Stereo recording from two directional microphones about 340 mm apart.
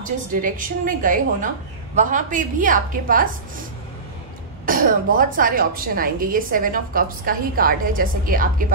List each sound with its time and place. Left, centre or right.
0.0 s a woman's voice: right
4.6 s a woman's voice: right